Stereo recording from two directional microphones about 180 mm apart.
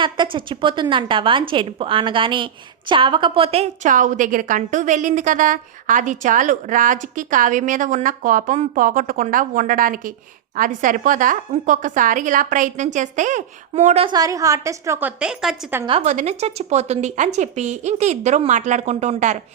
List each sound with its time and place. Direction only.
0.0 s a woman's voice: 25° right (ahead or behind)
14.1 s a woman's voice: 20° right (ahead or behind); by 15.8 s 5° right (ahead or behind)
15.9 s a woman's voice: 30° right (ahead or behind)